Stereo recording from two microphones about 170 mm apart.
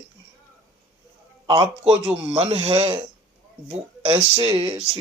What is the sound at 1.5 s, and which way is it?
Speech, 35° right (ahead or behind).